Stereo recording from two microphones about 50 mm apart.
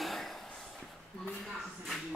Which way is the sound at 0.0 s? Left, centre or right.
Centre.